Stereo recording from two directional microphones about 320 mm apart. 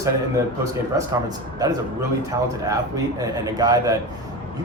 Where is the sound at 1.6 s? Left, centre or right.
Centre.